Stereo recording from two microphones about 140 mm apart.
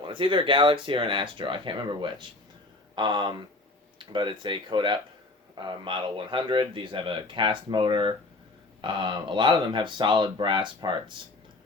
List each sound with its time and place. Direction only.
0.0 s a man's voice: 35° right (ahead or behind)